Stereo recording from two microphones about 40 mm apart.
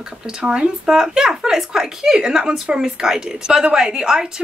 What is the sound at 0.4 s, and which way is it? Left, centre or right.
A woman's voice, right.